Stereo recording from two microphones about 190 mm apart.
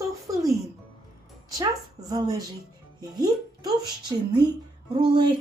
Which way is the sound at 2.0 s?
20° right (ahead or behind).